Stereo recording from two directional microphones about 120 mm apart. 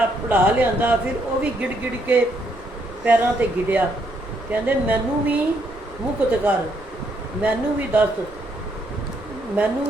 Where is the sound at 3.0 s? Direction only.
15° right (ahead or behind).